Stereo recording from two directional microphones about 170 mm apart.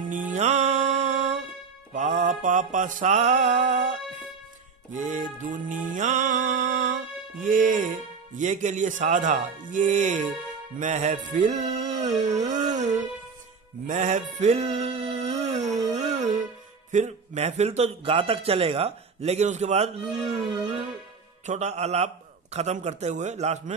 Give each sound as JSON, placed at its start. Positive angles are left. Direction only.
{"t": 0.1, "sound": "music", "side_deg": -50}
{"t": 2.0, "sound": "mantra", "side_deg": -45}
{"t": 4.9, "sound": "speech", "side_deg": -45}
{"t": 10.8, "sound": "music", "side_deg": -45}
{"t": 16.9, "sound": "a man's voice", "side_deg": -40}
{"t": 21.5, "sound": "a man's voice", "side_deg": -40}